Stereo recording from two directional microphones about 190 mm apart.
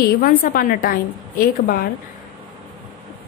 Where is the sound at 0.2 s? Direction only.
50° left (ahead or behind).